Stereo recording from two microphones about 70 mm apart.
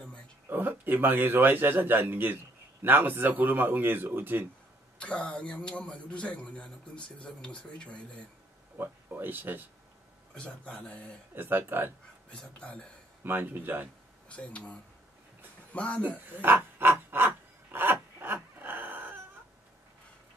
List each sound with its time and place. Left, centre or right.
0.5 s a man's voice: right
4.9 s a man's voice: centre
8.7 s speech: right
10.3 s a man's voice: centre
11.3 s speech: right
12.3 s a man's voice: centre
13.2 s a man's voice: right
14.3 s speech: centre
16.3 s a sound: right